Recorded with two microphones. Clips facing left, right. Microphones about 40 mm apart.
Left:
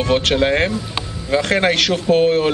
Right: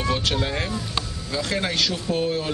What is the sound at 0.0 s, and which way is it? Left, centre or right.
Speech, left.